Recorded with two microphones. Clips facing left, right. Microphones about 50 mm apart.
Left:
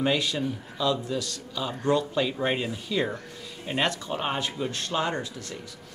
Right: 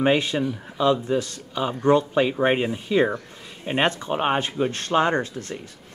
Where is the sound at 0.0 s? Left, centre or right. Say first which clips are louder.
Right 5 dB; right.